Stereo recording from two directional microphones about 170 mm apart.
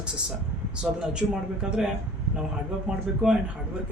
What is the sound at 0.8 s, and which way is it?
Speech, 5° right (ahead or behind).